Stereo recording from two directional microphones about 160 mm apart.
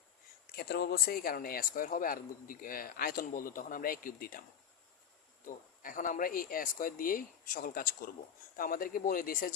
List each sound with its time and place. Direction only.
0.5 s speech: 80° left; by 4.4 s 65° left (ahead or behind)
5.5 s speech: 55° left (ahead or behind)